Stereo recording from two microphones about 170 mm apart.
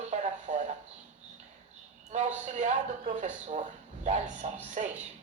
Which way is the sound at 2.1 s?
45° right (ahead or behind).